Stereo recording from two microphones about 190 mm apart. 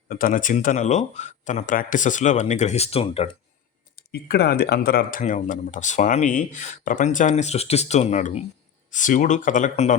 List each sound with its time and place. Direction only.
0.1 s speech: 50° left (ahead or behind); by 3.2 s 30° left (ahead or behind)
3.9 s speech: 55° left (ahead or behind); by 10.0 s 40° left (ahead or behind)